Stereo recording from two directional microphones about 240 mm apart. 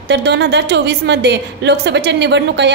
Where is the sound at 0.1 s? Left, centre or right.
Right.